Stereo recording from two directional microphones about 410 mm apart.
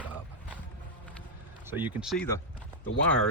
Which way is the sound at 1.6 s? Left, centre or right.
Centre.